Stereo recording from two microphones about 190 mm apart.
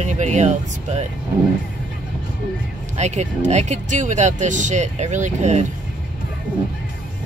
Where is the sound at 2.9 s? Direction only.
35° right (ahead or behind).